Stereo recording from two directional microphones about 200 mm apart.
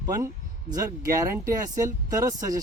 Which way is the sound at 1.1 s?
15° right (ahead or behind).